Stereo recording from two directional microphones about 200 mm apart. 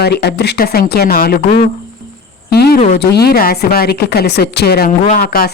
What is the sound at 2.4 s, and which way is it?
Speech, 55° left (ahead or behind).